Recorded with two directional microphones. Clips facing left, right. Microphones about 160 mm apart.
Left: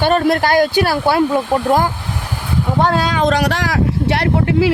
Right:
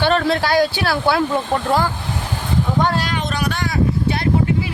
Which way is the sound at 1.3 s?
10° left (ahead or behind).